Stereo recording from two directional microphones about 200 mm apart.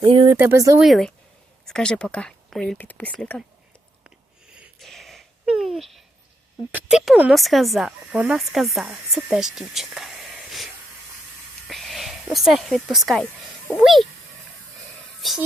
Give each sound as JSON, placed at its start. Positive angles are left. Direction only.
{"t": 0.0, "sound": "speech", "side_deg": -25}
{"t": 0.3, "sound": "speech", "side_deg": -15}
{"t": 0.8, "sound": "speech", "side_deg": 0}
{"t": 4.0, "sound": "a sound", "side_deg": -5}
{"t": 6.7, "sound": "speech", "side_deg": 0}
{"t": 11.7, "sound": "speech", "side_deg": 0}
{"t": 15.2, "sound": "music", "side_deg": 0}